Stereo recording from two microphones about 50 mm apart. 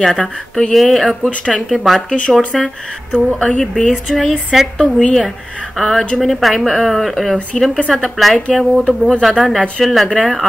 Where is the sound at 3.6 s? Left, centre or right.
Centre.